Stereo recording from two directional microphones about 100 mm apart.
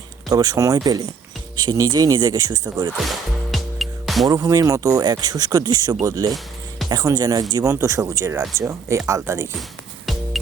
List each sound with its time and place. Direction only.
0.3 s speech: 40° right (ahead or behind)
3.0 s music: centre (ahead or behind)
4.3 s speech: 35° right (ahead or behind)
7.6 s speech: 25° right (ahead or behind)
10.1 s music: centre (ahead or behind)